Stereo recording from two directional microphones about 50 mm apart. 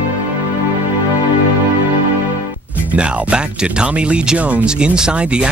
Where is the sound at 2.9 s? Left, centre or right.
Right.